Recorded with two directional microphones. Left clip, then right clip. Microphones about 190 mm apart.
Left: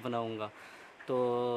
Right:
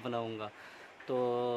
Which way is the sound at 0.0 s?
15° left (ahead or behind).